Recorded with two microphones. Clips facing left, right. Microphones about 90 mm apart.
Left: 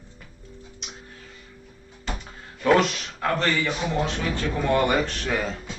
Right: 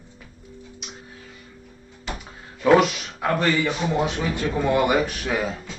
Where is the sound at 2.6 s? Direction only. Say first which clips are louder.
Right 3 dB; 5° right (ahead or behind).